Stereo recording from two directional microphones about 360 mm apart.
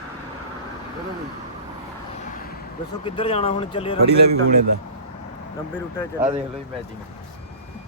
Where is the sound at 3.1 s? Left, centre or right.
Centre.